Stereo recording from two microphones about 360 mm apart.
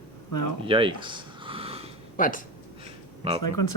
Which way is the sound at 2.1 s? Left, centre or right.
Left.